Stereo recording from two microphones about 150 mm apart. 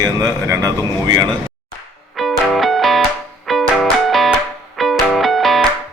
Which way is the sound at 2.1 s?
Centre (ahead or behind).